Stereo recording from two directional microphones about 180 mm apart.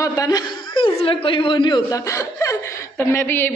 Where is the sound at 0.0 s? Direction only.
20° left (ahead or behind).